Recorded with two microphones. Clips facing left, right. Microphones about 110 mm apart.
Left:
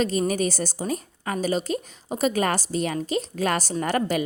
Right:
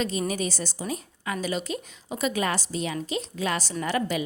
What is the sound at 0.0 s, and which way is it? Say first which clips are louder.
A woman's voice: left 5 dB; 45° left (ahead or behind).